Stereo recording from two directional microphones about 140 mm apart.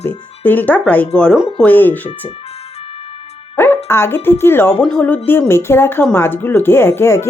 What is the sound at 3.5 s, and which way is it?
Speech, 15° left (ahead or behind).